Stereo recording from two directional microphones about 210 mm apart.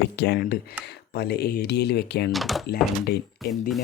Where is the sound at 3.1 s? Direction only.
50° left (ahead or behind).